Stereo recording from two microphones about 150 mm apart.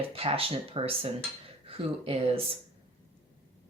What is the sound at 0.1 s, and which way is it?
A woman's voice, 40° right (ahead or behind).